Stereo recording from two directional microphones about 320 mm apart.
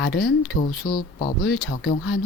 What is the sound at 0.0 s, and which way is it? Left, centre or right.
Speech, left.